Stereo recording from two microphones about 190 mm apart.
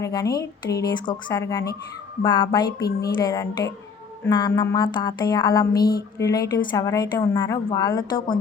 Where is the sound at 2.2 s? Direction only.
25° left (ahead or behind).